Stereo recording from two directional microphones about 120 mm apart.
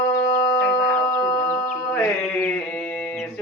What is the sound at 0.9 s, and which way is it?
Music, 20° left (ahead or behind).